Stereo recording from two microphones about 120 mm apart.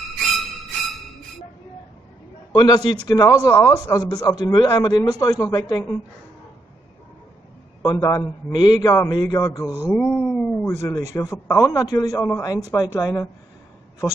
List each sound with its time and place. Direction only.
0.0 s music: centre (ahead or behind)
2.5 s a man's voice: 35° left (ahead or behind)
7.8 s a man's voice: 25° left (ahead or behind)
9.9 s a sound: 10° left (ahead or behind)
10.8 s a man's voice: 25° left (ahead or behind)
11.8 s a man's voice: 30° left (ahead or behind)